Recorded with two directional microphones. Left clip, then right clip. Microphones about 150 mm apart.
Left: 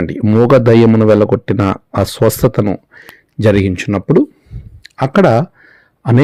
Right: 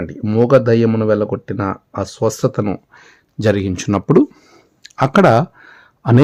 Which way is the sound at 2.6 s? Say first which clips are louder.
Left 4 dB; 15° left (ahead or behind).